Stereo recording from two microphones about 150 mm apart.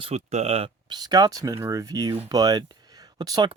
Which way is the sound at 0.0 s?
45° right (ahead or behind).